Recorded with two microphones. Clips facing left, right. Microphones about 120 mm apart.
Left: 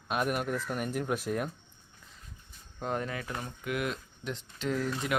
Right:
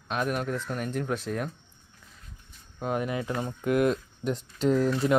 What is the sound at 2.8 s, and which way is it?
Speech, 10° right (ahead or behind).